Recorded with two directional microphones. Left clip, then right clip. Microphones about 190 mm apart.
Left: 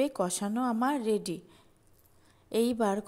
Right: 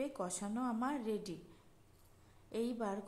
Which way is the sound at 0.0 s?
35° left (ahead or behind).